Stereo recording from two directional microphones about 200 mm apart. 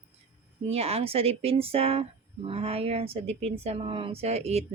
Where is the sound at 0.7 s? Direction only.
30° right (ahead or behind).